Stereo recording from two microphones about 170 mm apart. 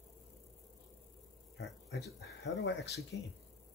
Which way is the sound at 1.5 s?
85° left.